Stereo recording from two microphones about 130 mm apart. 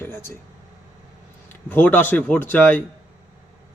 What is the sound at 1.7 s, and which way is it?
Speech, 15° left (ahead or behind).